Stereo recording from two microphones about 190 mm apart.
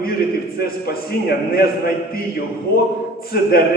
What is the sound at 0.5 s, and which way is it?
A man's voice, 55° left (ahead or behind).